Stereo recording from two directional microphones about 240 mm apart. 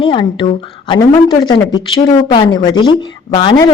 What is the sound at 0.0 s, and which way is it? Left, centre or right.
A woman's voice, left.